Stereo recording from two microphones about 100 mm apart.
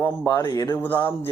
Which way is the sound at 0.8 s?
20° left (ahead or behind).